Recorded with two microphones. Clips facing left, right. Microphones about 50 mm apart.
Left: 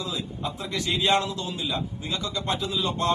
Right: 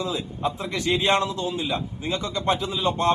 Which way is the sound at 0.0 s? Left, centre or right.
Right.